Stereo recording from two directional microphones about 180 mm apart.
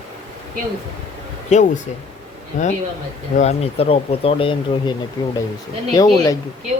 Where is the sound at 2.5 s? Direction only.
45° left (ahead or behind); by 6.4 s 20° left (ahead or behind).